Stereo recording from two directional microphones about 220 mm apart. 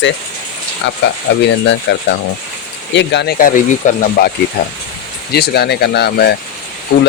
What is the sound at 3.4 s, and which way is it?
Speech, 40° left (ahead or behind).